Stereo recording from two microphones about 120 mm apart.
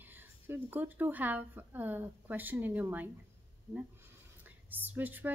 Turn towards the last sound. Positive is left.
turn(degrees=-15)  # may be behind; listen again after turning